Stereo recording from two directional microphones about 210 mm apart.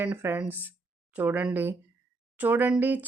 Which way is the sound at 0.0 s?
10° right (ahead or behind).